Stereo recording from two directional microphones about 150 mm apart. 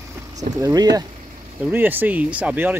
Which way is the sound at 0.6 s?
25° right (ahead or behind).